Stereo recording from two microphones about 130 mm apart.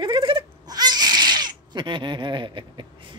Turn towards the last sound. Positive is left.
turn(degrees=-40)  # may be behind; listen again after turning